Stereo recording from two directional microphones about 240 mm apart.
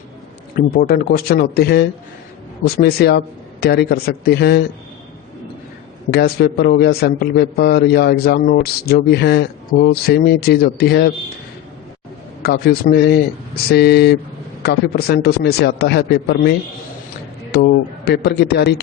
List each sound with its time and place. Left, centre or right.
0.5 s a man's voice: left
6.1 s a man's voice: left
12.4 s a man's voice: left